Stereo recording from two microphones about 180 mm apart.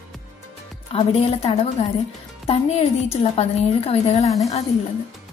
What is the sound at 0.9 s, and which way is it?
A woman's voice, 35° left (ahead or behind).